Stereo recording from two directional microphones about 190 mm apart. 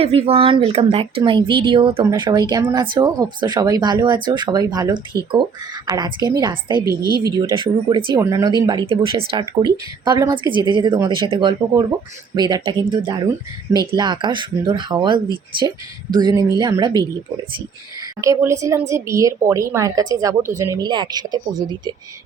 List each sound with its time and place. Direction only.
0.0 s speech: 30° right (ahead or behind)
18.2 s a woman's voice: 15° right (ahead or behind)